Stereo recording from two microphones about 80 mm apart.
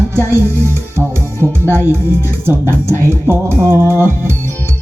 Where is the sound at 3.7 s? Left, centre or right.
Right.